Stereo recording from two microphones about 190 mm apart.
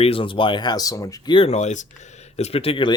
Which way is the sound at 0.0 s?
30° left (ahead or behind).